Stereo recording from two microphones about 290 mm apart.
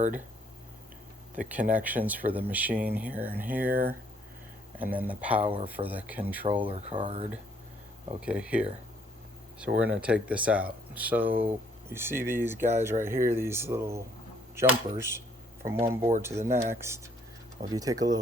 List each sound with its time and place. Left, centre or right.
1.4 s speech: centre
4.8 s speech: centre
6.7 s speech: centre
8.2 s speech: centre